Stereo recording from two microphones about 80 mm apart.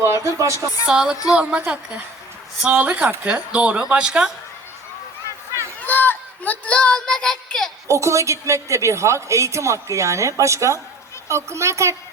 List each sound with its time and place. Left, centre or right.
0.0 s speech: right
0.5 s speech: left
0.9 s speech: centre
5.8 s speech: left; by 7.7 s centre
7.9 s a woman's voice: right